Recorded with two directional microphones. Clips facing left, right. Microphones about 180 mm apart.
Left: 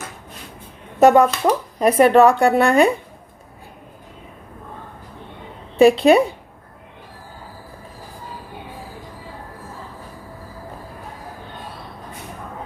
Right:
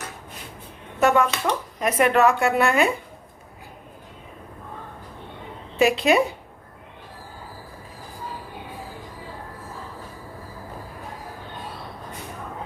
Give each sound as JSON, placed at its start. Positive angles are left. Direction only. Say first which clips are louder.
{"t": 0.9, "sound": "speech", "louder": "left 7 dB", "side_deg": 40}
{"t": 5.7, "sound": "speech", "louder": "left 7 dB", "side_deg": 30}